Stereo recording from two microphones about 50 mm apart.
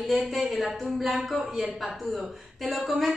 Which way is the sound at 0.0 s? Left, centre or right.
Centre.